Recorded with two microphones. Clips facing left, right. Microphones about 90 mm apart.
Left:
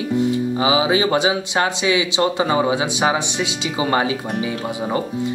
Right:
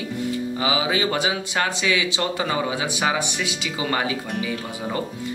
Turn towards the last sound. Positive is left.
turn(degrees=25)  # may be behind; listen again after turning